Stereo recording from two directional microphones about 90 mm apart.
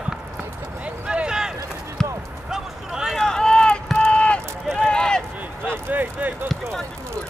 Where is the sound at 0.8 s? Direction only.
10° right (ahead or behind).